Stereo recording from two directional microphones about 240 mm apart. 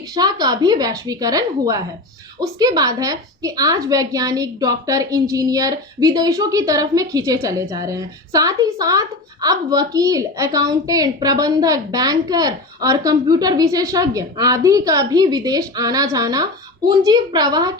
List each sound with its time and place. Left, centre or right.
0.1 s a woman's voice: centre